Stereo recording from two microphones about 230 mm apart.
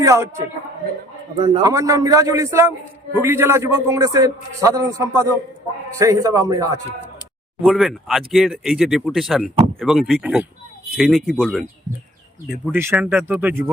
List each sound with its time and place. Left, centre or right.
0.0 s a man's voice: centre
1.4 s a man's voice: right
1.6 s a man's voice: centre
7.6 s speech: centre
12.7 s a man's voice: centre